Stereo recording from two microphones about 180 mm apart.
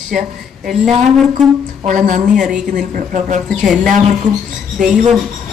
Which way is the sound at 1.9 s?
45° right (ahead or behind).